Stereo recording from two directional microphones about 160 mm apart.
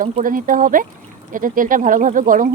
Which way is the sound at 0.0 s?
60° right (ahead or behind).